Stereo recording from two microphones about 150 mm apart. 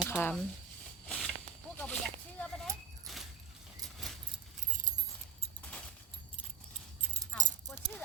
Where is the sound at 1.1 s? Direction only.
5° left (ahead or behind).